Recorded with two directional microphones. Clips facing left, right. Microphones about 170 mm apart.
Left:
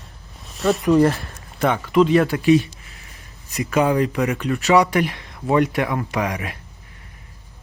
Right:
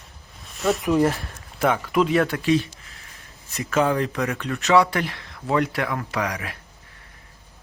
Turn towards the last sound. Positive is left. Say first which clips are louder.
# left 3 dB
turn(degrees=20)  # may be behind; listen again after turning